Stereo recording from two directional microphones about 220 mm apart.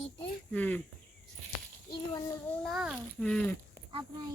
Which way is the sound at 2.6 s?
Centre (ahead or behind).